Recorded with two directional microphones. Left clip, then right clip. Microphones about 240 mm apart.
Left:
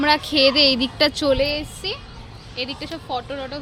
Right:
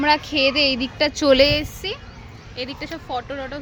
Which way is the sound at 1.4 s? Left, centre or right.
Right.